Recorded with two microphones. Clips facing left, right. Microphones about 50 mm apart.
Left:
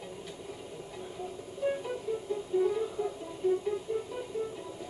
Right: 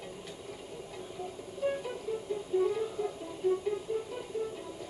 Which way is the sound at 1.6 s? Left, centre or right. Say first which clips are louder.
Left 1 dB; centre.